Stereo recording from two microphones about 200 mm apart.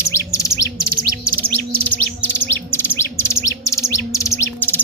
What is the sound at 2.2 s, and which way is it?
Chirp, 10° left (ahead or behind).